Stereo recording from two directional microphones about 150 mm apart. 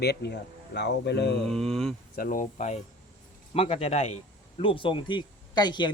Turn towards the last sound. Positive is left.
turn(degrees=30)  # may be behind; listen again after turning